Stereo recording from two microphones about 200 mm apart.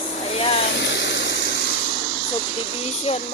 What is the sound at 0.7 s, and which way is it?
Vehicle, 60° left (ahead or behind).